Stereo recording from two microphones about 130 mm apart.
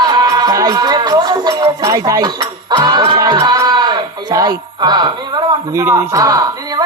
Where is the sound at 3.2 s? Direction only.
30° right (ahead or behind).